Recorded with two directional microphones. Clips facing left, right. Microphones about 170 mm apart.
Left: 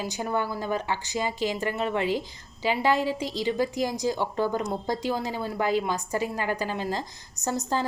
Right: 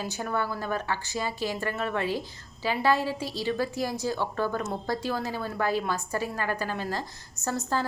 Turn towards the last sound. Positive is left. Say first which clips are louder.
# left 1 dB
turn(degrees=20)  # may be behind; listen again after turning